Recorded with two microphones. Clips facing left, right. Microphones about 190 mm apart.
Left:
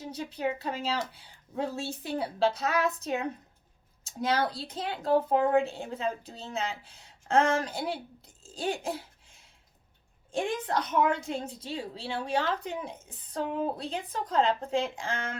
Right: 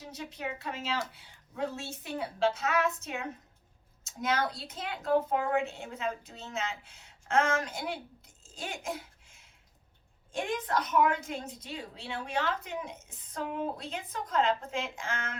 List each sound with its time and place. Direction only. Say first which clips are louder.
0.0 s a woman's voice: left 7 dB; 35° left (ahead or behind)